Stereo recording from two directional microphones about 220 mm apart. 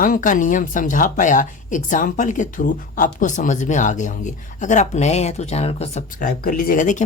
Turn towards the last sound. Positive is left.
turn(degrees=35)  # may be behind; listen again after turning